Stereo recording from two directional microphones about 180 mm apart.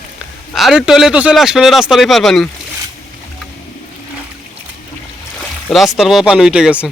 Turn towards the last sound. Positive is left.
turn(degrees=-5)  # may be behind; listen again after turning